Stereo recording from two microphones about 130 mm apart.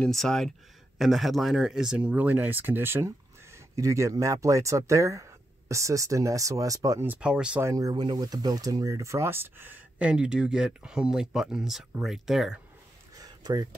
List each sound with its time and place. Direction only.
0.0 s speech: 5° left (ahead or behind); by 7.1 s 25° right (ahead or behind)
7.1 s speech: 10° right (ahead or behind)
7.6 s speech: 25° right (ahead or behind); by 12.5 s centre (ahead or behind)
13.1 s a sound: 30° right (ahead or behind)